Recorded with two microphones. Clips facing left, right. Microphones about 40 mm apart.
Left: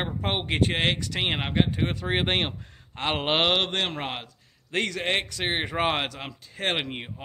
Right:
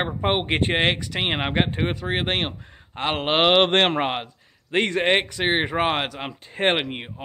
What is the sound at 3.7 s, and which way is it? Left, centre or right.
Speech, right.